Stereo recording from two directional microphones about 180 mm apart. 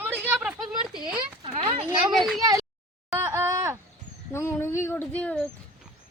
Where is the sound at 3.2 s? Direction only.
15° right (ahead or behind).